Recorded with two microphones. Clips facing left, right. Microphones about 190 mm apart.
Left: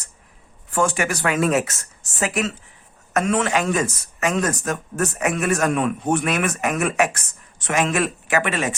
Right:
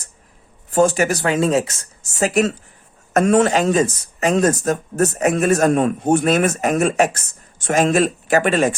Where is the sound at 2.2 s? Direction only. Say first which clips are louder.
Right 6 dB; 40° right (ahead or behind).